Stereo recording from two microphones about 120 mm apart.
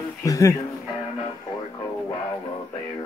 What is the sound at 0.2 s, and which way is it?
Speech, 30° left (ahead or behind).